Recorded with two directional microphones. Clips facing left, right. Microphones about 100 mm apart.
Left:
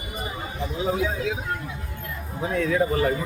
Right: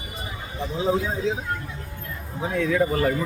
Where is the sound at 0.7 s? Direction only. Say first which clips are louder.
Right 2 dB; 30° right (ahead or behind).